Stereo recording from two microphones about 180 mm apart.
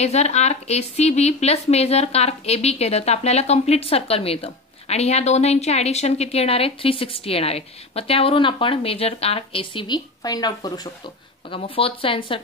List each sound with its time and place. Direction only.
0.0 s speech: 35° left (ahead or behind)